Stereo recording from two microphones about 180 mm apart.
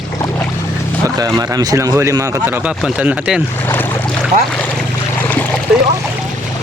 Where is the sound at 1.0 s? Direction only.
20° right (ahead or behind).